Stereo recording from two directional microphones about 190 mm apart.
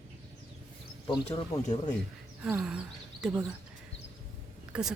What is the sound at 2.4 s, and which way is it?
Speech, 5° right (ahead or behind).